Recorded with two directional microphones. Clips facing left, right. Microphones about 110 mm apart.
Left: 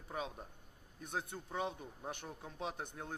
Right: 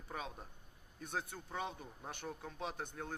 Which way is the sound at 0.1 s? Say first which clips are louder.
Left 3 dB; 15° left (ahead or behind).